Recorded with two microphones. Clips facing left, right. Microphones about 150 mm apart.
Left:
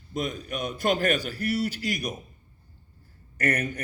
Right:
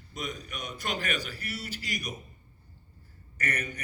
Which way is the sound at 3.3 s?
50° left (ahead or behind).